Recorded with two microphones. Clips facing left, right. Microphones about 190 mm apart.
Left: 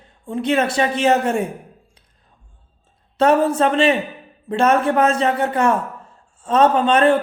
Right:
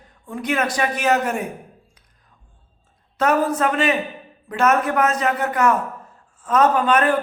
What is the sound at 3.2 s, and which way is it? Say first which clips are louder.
A man's voice: left 4 dB; 30° left (ahead or behind).